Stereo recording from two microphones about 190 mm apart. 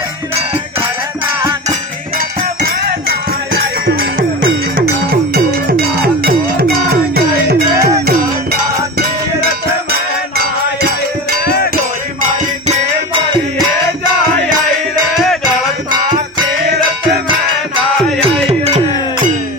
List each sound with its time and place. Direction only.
3.8 s music: 55° right (ahead or behind)
10.3 s music: 55° right (ahead or behind)